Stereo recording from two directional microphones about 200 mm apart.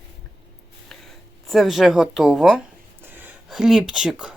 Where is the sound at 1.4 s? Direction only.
Centre (ahead or behind).